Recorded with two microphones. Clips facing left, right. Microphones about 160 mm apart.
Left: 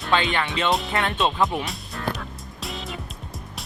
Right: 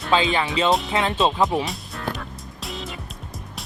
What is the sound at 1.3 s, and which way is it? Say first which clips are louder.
Speech: right 3 dB; 20° right (ahead or behind).